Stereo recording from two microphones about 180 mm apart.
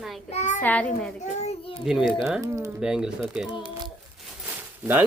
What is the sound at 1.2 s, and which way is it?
Speech, 40° left (ahead or behind).